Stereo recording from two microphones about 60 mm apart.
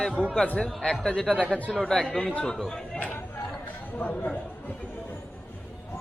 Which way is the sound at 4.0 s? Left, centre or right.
Left.